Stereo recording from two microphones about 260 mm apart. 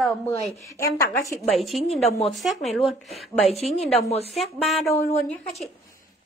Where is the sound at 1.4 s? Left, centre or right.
Centre.